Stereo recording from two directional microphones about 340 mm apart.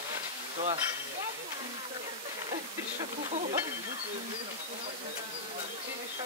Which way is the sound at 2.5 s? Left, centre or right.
Centre.